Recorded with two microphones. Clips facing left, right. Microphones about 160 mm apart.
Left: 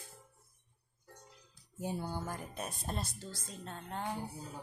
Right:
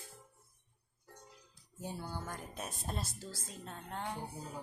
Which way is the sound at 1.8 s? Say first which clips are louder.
Left 4 dB; 15° left (ahead or behind).